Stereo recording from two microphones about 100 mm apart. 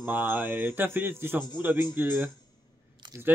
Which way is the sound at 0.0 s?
20° right (ahead or behind).